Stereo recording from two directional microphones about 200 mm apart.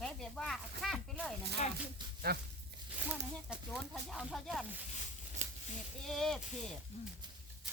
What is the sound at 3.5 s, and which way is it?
Speech, centre (ahead or behind).